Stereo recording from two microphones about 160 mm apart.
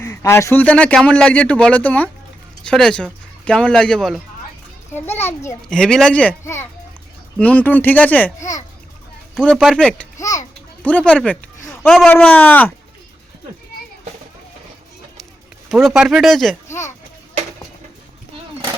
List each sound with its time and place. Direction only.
0.0 s a man's voice: 15° left (ahead or behind)
4.9 s a man's voice: 15° left (ahead or behind)
5.6 s a man's voice: 5° left (ahead or behind)
10.2 s a child's voice: 20° left (ahead or behind)
10.8 s a man's voice: 10° left (ahead or behind)
11.3 s a sound: 15° left (ahead or behind)
11.9 s a man's voice: 5° left (ahead or behind)
15.7 s speech: centre (ahead or behind)
16.6 s a child's voice: 15° left (ahead or behind)